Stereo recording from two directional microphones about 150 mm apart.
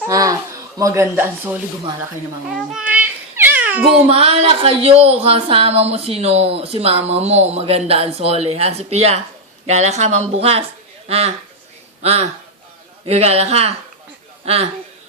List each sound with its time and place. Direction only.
0.1 s speech: 25° right (ahead or behind)
2.7 s cat: 10° right (ahead or behind)
4.0 s speech: 40° right (ahead or behind)